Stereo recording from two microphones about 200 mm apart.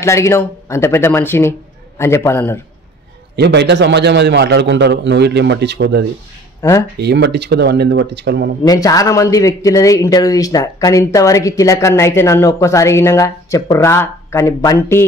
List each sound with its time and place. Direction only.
0.0 s a man's voice: 15° left (ahead or behind)
3.3 s a man's voice: 60° right (ahead or behind)
6.6 s a man's voice: 15° left (ahead or behind)
7.0 s a man's voice: 55° right (ahead or behind)
8.6 s a man's voice: 15° left (ahead or behind)